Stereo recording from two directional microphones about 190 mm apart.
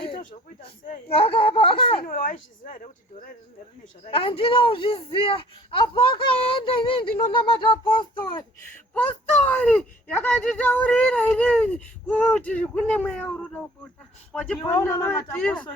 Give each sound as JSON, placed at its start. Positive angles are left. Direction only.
{"t": 0.6, "sound": "a man's voice", "side_deg": 30}
{"t": 2.0, "sound": "speech", "side_deg": 45}
{"t": 4.1, "sound": "a man's voice", "side_deg": 30}
{"t": 9.0, "sound": "speech", "side_deg": 10}
{"t": 14.6, "sound": "speech", "side_deg": 10}